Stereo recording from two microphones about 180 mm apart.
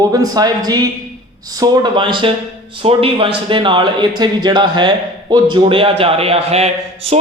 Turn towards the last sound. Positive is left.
turn(degrees=-35)  # may be behind; listen again after turning